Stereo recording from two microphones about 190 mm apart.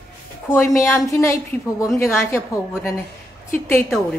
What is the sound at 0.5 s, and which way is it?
A woman's voice, 15° left (ahead or behind).